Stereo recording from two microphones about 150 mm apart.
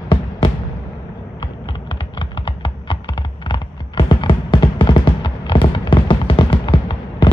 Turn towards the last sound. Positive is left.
turn(degrees=30)  # may be behind; listen again after turning